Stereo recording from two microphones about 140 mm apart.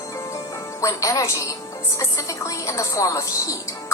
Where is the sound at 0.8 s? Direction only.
25° left (ahead or behind).